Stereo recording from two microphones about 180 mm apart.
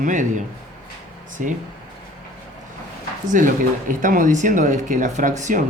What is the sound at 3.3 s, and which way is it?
Speech, 45° right (ahead or behind).